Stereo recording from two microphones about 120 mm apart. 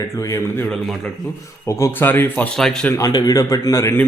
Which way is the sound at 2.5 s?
5° left (ahead or behind).